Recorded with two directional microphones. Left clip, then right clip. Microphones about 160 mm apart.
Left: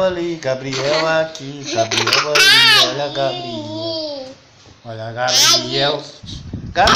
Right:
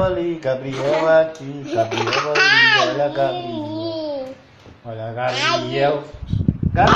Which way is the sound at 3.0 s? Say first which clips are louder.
Right 1 dB; 45° left (ahead or behind).